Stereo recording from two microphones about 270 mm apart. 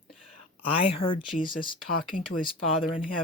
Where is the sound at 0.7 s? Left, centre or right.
Centre.